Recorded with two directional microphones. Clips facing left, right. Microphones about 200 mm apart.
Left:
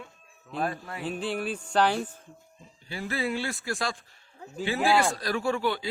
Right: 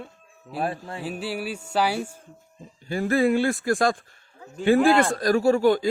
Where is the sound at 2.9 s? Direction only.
50° right (ahead or behind).